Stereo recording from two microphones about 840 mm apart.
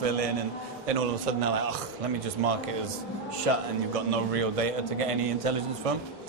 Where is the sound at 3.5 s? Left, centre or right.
Right.